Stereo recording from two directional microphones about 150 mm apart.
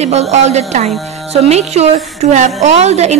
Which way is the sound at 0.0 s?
45° right (ahead or behind).